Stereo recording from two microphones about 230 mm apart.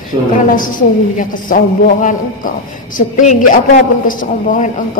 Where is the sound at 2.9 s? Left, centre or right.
Left.